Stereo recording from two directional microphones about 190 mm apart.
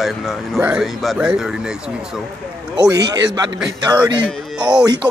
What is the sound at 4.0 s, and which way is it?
Speech, 5° right (ahead or behind).